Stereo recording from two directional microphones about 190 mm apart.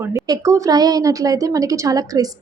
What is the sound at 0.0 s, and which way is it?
A woman's voice, 15° right (ahead or behind).